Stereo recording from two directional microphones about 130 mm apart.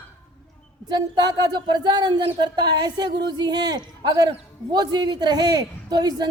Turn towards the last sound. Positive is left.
turn(degrees=-30)  # may be behind; listen again after turning